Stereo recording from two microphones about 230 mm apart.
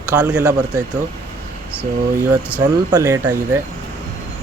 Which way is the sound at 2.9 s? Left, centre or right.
Centre.